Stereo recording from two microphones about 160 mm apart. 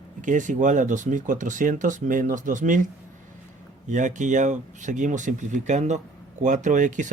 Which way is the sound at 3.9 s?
50° right (ahead or behind).